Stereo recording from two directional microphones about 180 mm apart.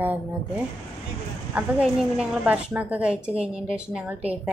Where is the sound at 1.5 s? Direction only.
5° right (ahead or behind).